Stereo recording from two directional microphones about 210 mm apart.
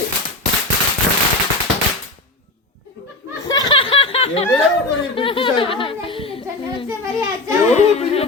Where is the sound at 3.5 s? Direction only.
20° left (ahead or behind).